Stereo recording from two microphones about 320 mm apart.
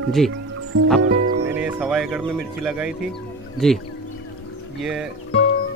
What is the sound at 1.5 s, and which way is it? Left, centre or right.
Speech, centre.